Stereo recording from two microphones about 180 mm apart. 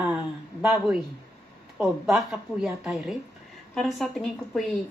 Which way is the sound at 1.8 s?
Centre (ahead or behind).